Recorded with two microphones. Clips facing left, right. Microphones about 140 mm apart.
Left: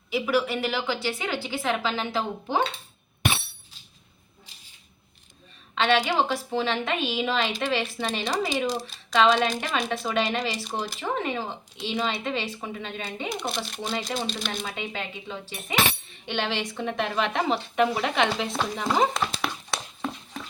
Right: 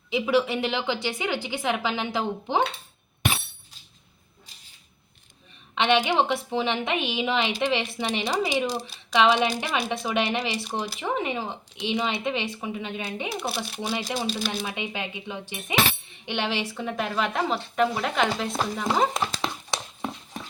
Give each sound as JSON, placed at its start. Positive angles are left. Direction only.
{"t": 0.1, "sound": "a woman's voice", "side_deg": -20}
{"t": 5.7, "sound": "a woman's voice", "side_deg": -15}
{"t": 14.8, "sound": "a woman's voice", "side_deg": -15}
{"t": 19.4, "sound": "a sound", "side_deg": -20}